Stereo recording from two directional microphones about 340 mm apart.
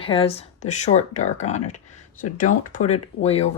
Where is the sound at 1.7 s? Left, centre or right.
Left.